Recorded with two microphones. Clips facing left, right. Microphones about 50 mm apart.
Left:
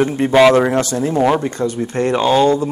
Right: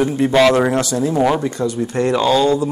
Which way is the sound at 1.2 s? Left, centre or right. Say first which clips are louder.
Left 2 dB; centre.